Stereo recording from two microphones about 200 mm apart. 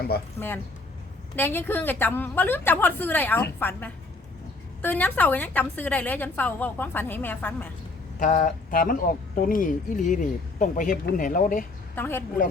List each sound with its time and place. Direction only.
0.3 s a woman's voice: 10° left (ahead or behind)
8.2 s speech: 40° left (ahead or behind)
11.9 s a woman's voice: 10° left (ahead or behind)